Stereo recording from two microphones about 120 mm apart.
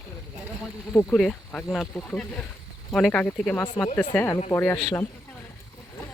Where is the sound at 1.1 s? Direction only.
5° left (ahead or behind).